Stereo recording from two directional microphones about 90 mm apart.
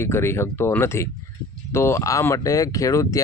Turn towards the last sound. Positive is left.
turn(degrees=35)  # may be behind; listen again after turning